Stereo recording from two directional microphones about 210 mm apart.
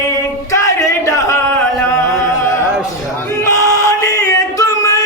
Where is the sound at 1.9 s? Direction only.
15° left (ahead or behind).